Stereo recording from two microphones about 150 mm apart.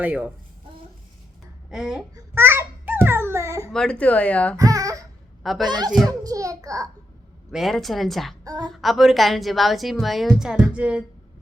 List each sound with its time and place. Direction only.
0.0 s a child's voice: 10° right (ahead or behind)
1.7 s speech: 5° right (ahead or behind)
2.1 s babbling: 15° right (ahead or behind)
3.7 s speech: 5° left (ahead or behind)
4.5 s a sound: 25° right (ahead or behind)
5.4 s a woman's voice: centre (ahead or behind)
5.6 s speech: 30° right (ahead or behind)
6.1 s a sound: 25° right (ahead or behind)
7.5 s speech: centre (ahead or behind)
8.4 s speech: 25° right (ahead or behind)
8.7 s speech: centre (ahead or behind)